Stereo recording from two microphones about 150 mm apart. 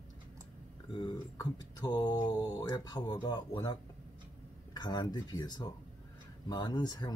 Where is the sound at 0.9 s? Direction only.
30° left (ahead or behind).